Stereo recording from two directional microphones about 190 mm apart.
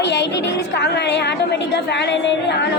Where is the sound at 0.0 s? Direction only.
65° left (ahead or behind).